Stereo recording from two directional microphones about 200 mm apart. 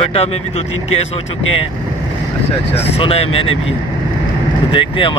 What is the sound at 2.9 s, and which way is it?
Speech, 30° left (ahead or behind).